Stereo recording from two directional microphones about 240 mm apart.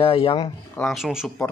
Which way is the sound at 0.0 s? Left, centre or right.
Left.